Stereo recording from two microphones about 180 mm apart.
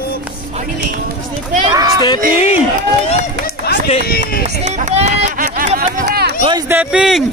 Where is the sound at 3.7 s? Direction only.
60° left (ahead or behind).